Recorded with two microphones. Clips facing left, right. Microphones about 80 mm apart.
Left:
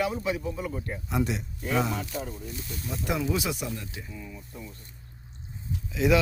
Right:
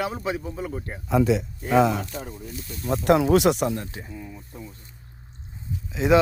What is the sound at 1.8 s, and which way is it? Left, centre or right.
Speech, right.